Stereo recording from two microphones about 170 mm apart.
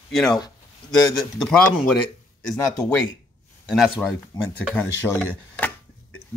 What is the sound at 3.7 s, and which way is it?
Speech, centre (ahead or behind).